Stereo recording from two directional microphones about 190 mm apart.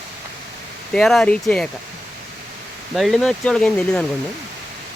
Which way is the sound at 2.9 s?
Centre (ahead or behind).